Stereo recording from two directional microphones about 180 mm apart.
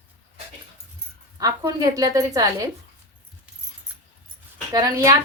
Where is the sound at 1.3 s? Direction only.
20° right (ahead or behind).